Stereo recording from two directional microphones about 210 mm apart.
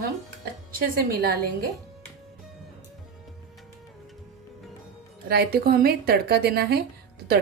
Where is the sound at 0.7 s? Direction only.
45° right (ahead or behind).